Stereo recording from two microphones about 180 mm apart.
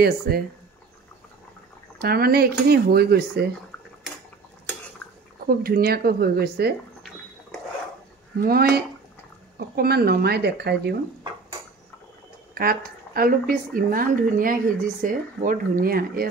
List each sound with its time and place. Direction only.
0.3 s speech: 60° right (ahead or behind)
2.0 s speech: 60° right (ahead or behind)
5.6 s speech: 55° right (ahead or behind)
8.4 s speech: 60° right (ahead or behind)
12.5 s a woman's voice: 55° right (ahead or behind)